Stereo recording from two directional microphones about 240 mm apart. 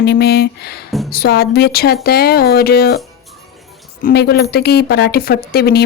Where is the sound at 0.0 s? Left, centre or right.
Left.